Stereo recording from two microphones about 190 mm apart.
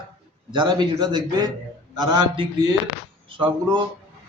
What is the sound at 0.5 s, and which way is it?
A man's voice, 25° right (ahead or behind).